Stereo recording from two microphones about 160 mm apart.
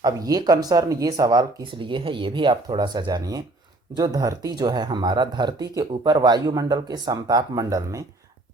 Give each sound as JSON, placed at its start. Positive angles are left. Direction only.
{"t": 0.0, "sound": "speech", "side_deg": -25}